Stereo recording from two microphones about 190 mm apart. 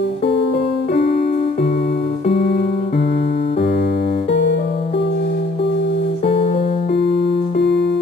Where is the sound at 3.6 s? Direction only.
55° left (ahead or behind).